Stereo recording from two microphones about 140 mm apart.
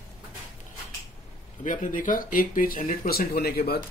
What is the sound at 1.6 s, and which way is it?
Speech, 70° left (ahead or behind).